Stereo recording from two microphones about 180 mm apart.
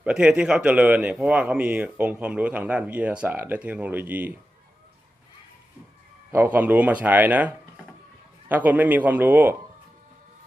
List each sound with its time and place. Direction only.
0.0 s speech: 5° right (ahead or behind)
6.3 s speech: 10° right (ahead or behind)